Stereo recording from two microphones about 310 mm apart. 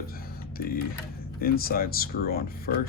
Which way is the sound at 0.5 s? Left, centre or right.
Left.